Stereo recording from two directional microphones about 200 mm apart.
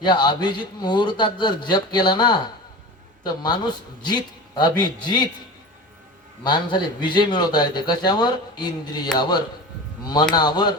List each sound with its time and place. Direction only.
0.0 s a man's voice: 20° left (ahead or behind)
6.4 s a man's voice: 20° left (ahead or behind)